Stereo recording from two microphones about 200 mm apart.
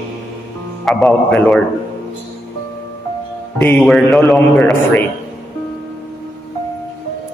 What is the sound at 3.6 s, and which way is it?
Music, 5° left (ahead or behind).